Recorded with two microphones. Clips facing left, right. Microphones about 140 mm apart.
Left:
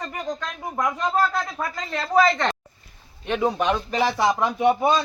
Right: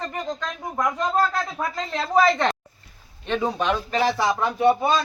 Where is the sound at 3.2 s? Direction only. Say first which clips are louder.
Left 1 dB; 15° left (ahead or behind).